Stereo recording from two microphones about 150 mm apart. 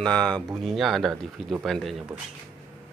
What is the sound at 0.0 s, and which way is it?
Speech, 5° left (ahead or behind).